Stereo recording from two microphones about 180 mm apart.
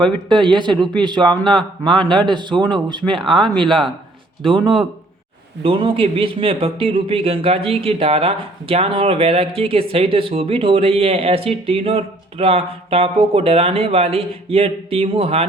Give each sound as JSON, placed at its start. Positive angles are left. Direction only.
{"t": 0.0, "sound": "a man's voice", "side_deg": -25}
{"t": 3.3, "sound": "speech", "side_deg": 0}
{"t": 5.6, "sound": "a man's voice", "side_deg": -30}